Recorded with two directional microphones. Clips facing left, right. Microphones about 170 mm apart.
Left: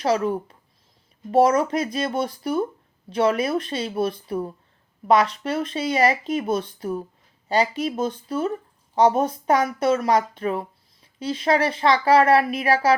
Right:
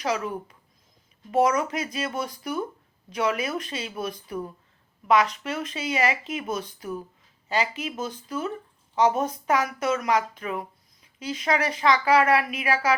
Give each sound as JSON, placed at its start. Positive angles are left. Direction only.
{"t": 0.0, "sound": "speech", "side_deg": 35}